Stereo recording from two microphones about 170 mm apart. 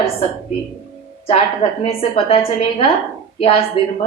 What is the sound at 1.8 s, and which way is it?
A woman's voice, 35° left (ahead or behind).